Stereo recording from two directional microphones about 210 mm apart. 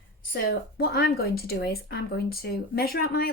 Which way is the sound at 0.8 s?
50° left (ahead or behind).